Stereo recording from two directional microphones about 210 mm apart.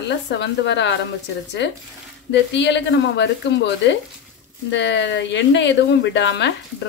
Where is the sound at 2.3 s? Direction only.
55° left (ahead or behind).